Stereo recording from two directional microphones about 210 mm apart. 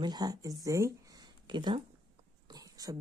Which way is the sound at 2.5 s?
15° right (ahead or behind).